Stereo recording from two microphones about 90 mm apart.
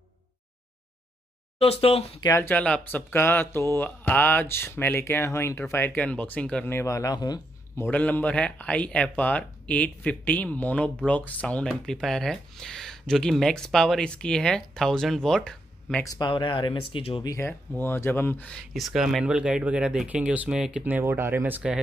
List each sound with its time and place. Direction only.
1.6 s speech: 90° left
2.4 s speech: 15° left (ahead or behind)
3.1 s speech: 25° left (ahead or behind)
6.7 s speech: 35° left (ahead or behind)
7.9 s speech: 20° left (ahead or behind)
16.2 s speech: 65° left (ahead or behind); by 17.2 s 90° left
17.4 s speech: 25° left (ahead or behind)
18.7 s speech: centre (ahead or behind)
21.0 s speech: 30° right (ahead or behind)